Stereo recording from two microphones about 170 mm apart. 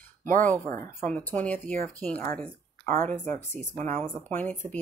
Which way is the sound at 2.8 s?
50° right (ahead or behind).